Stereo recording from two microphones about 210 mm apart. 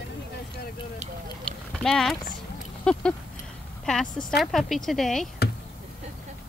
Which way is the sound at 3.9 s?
5° left (ahead or behind).